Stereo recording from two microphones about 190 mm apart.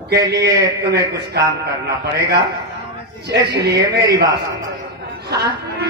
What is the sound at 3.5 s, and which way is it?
Speech, 60° right (ahead or behind).